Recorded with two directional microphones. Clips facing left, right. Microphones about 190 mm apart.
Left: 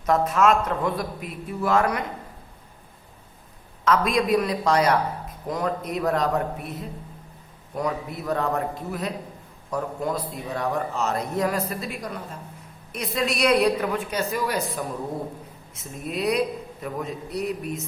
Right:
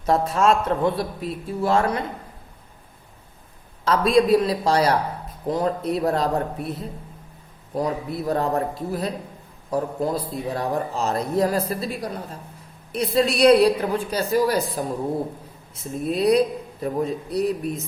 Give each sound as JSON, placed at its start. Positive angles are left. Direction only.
{"t": 0.0, "sound": "a man's voice", "side_deg": -30}
{"t": 3.8, "sound": "a man's voice", "side_deg": -30}
{"t": 7.8, "sound": "a man's voice", "side_deg": -35}